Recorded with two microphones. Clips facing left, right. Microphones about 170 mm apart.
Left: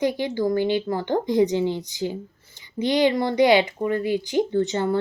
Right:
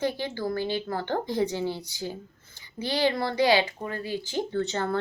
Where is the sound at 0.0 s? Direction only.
15° left (ahead or behind).